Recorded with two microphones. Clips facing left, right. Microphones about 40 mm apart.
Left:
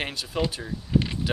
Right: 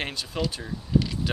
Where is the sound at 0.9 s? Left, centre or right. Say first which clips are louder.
Even; left.